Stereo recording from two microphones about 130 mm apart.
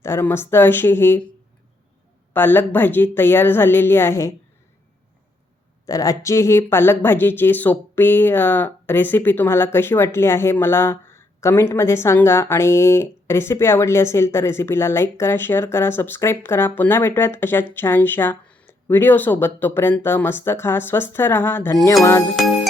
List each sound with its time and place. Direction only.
0.0 s speech: 20° left (ahead or behind)
2.3 s speech: 15° left (ahead or behind)
5.8 s speech: 25° left (ahead or behind)